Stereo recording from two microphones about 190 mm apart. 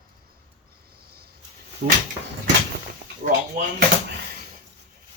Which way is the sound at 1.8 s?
60° right (ahead or behind).